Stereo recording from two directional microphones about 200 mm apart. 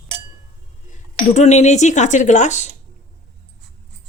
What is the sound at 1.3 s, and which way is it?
Speech, 35° left (ahead or behind).